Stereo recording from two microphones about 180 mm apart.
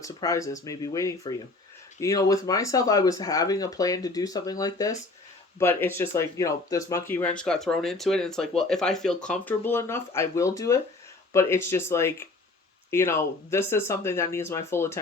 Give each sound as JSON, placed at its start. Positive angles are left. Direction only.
{"t": 0.0, "sound": "speech", "side_deg": 20}